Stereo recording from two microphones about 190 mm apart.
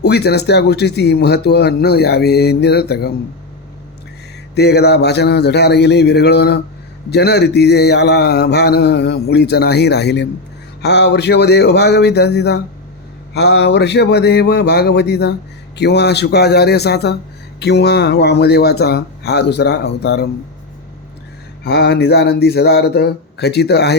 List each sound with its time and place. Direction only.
0.0 s mantra: 60° left (ahead or behind)
4.5 s mantra: 60° left (ahead or behind)
21.6 s mantra: 65° left (ahead or behind)